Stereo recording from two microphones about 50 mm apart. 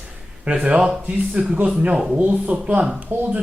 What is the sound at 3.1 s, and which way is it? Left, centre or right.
Speech, right.